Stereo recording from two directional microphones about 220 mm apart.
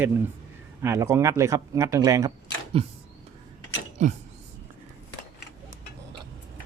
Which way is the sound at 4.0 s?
35° right (ahead or behind).